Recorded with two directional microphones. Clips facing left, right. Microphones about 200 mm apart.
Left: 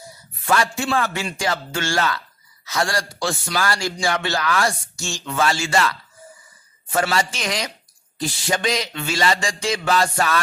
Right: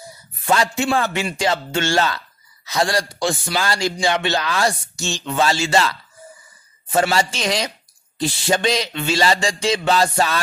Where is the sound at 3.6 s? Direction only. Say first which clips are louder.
Right 1 dB; 20° right (ahead or behind).